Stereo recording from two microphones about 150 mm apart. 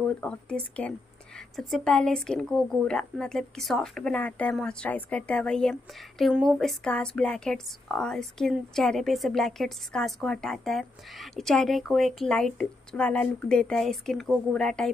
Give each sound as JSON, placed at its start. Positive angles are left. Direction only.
{"t": 0.0, "sound": "speech", "side_deg": 5}